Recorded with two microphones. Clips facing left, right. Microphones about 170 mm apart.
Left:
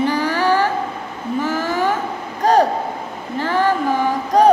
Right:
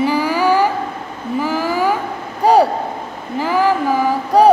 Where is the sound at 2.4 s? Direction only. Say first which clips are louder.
Right 2 dB; 10° right (ahead or behind).